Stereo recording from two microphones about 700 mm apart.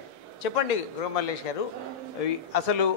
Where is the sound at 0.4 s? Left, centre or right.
Left.